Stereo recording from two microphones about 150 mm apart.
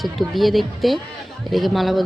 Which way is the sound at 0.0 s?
Centre (ahead or behind).